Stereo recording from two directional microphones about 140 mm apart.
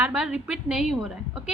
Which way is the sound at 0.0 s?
10° right (ahead or behind).